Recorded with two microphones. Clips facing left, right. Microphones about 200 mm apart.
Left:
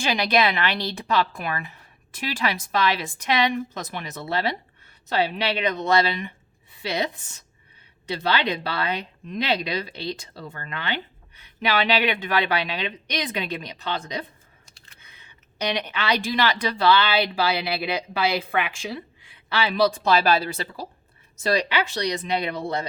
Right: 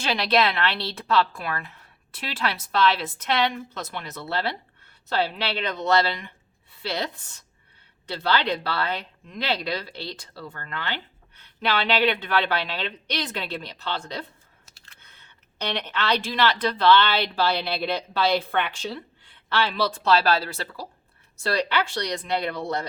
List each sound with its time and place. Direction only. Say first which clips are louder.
0.0 s a woman's voice: left 1 dB; 15° left (ahead or behind)